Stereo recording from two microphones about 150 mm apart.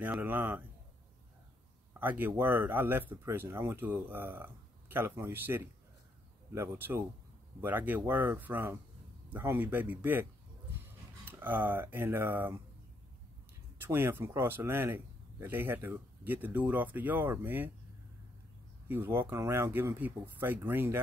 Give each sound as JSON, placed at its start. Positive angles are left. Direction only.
{"t": 0.0, "sound": "speech", "side_deg": -10}
{"t": 2.0, "sound": "speech", "side_deg": -10}
{"t": 11.2, "sound": "speech", "side_deg": -15}
{"t": 13.7, "sound": "speech", "side_deg": -15}
{"t": 18.9, "sound": "speech", "side_deg": -15}